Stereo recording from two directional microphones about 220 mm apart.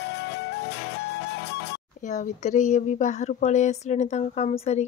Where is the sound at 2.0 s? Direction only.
35° left (ahead or behind).